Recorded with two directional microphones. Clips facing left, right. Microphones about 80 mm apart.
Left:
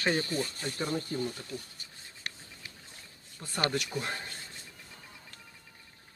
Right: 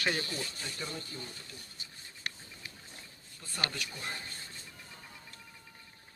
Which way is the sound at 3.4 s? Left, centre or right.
Left.